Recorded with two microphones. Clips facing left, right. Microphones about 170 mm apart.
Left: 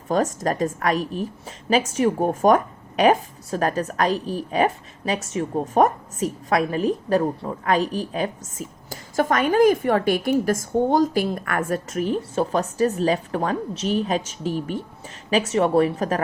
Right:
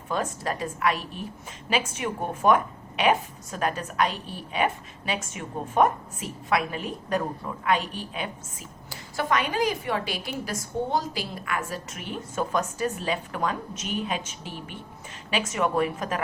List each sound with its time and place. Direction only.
0.1 s a woman's voice: 40° left (ahead or behind)